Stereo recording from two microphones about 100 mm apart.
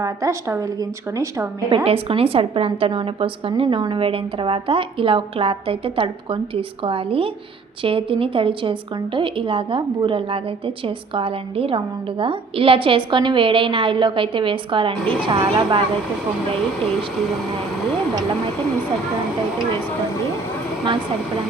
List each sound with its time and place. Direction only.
0.0 s a woman's voice: 30° right (ahead or behind)
1.7 s a woman's voice: 75° right (ahead or behind); by 15.8 s 50° right (ahead or behind)